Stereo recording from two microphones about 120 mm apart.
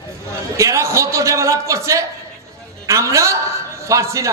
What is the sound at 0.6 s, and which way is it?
A man's voice, 25° right (ahead or behind).